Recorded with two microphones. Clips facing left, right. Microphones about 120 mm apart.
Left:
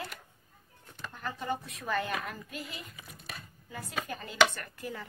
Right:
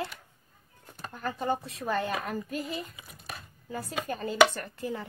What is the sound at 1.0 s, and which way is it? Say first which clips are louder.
A woman's voice: right 5 dB; 40° right (ahead or behind).